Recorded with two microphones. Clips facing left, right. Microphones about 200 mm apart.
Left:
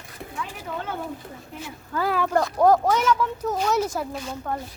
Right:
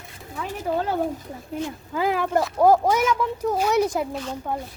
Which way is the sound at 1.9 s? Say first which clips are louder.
Right 1 dB; 15° right (ahead or behind).